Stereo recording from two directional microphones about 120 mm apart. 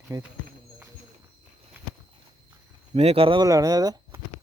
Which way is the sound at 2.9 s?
60° right (ahead or behind).